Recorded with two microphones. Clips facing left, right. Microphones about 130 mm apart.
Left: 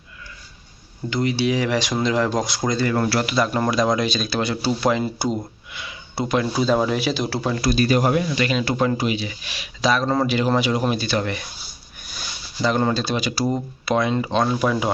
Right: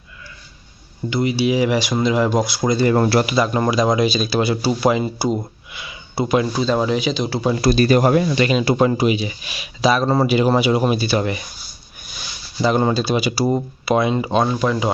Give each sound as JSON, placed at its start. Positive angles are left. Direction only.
{"t": 1.1, "sound": "speech", "side_deg": -5}
{"t": 2.9, "sound": "speech", "side_deg": -30}
{"t": 3.3, "sound": "speech", "side_deg": 0}
{"t": 7.5, "sound": "speech", "side_deg": -30}
{"t": 7.8, "sound": "speech", "side_deg": -50}
{"t": 8.4, "sound": "speech", "side_deg": -20}
{"t": 12.6, "sound": "speech", "side_deg": -10}